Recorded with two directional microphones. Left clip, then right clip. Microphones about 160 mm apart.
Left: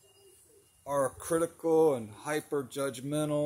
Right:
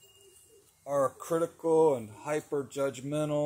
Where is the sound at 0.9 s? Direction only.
10° left (ahead or behind).